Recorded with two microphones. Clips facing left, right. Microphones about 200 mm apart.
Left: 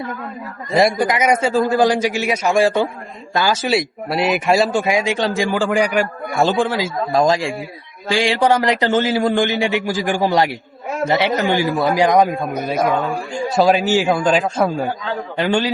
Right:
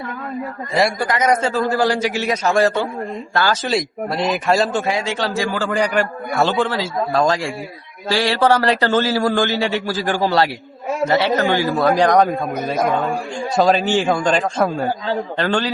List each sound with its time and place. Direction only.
0.7 s a man's voice: 20° left (ahead or behind)
12.3 s a man's voice: centre (ahead or behind)
15.4 s a man's voice: 15° left (ahead or behind)